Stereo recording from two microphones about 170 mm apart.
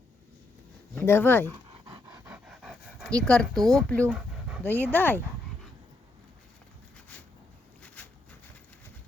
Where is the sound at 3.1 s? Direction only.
5° left (ahead or behind).